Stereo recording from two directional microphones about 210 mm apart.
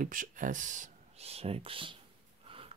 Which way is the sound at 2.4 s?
25° right (ahead or behind).